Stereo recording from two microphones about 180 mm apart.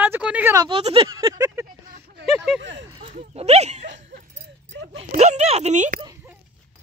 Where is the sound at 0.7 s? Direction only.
30° right (ahead or behind).